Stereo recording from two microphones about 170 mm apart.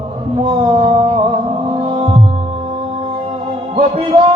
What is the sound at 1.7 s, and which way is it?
Music, 40° right (ahead or behind).